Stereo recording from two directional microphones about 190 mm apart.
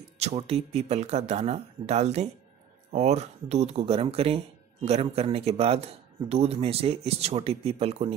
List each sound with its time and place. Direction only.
0.2 s speech: 35° right (ahead or behind)